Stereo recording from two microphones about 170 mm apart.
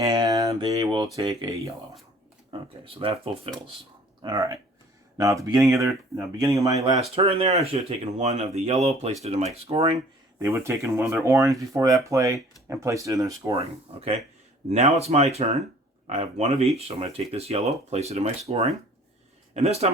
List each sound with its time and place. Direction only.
0.0 s a sound: 20° right (ahead or behind)
1.3 s speech: 20° right (ahead or behind)
2.5 s speech: 30° right (ahead or behind)
7.0 s speech: 35° right (ahead or behind)
10.4 s speech: 15° right (ahead or behind)
13.6 s speech: 35° right (ahead or behind)